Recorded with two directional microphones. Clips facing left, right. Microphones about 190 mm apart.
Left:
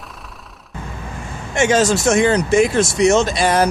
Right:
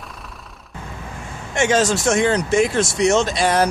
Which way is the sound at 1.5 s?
5° left (ahead or behind).